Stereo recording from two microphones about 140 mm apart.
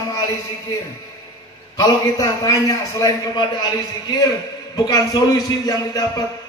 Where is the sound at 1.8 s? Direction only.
25° left (ahead or behind).